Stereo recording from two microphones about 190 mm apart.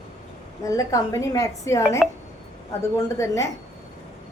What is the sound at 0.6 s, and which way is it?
A woman's voice, 15° left (ahead or behind).